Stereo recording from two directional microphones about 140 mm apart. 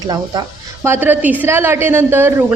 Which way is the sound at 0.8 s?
15° right (ahead or behind).